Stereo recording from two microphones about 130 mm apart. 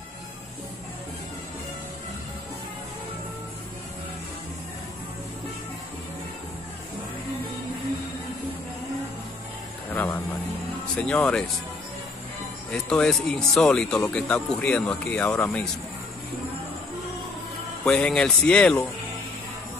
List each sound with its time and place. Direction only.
9.9 s a sound: 15° left (ahead or behind)
11.0 s speech: 10° left (ahead or behind)
12.7 s speech: 5° left (ahead or behind)
17.8 s speech: 5° left (ahead or behind)